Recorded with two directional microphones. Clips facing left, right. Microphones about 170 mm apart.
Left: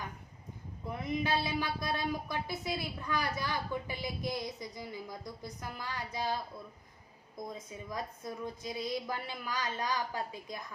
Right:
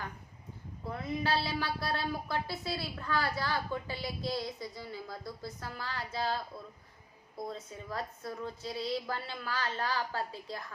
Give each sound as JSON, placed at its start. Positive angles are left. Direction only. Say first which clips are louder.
{"t": 0.9, "sound": "a woman's voice", "louder": "even", "side_deg": 15}
{"t": 7.4, "sound": "a woman's voice", "louder": "right 2 dB", "side_deg": 15}